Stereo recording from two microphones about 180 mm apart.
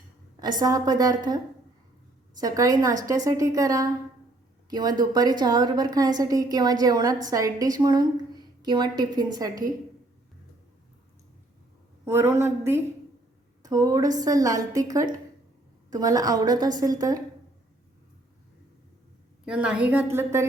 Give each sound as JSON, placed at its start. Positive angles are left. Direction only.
{"t": 0.6, "sound": "a woman's voice", "side_deg": -20}
{"t": 2.4, "sound": "a woman's voice", "side_deg": -20}
{"t": 12.0, "sound": "a woman's voice", "side_deg": -15}
{"t": 19.5, "sound": "a woman's voice", "side_deg": -5}